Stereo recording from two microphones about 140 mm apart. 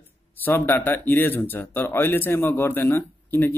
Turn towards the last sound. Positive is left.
turn(degrees=15)  # may be behind; listen again after turning